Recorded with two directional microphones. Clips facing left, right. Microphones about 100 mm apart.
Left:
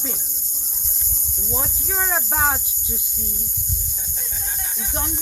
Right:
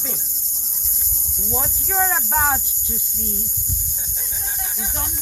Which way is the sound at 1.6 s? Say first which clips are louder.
Right 5 dB; 5° left (ahead or behind).